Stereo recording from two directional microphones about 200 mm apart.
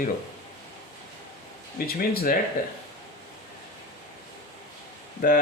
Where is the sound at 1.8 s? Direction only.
50° left (ahead or behind).